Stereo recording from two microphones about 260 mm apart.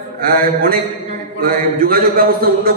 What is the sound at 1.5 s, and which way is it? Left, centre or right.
A man's voice, right.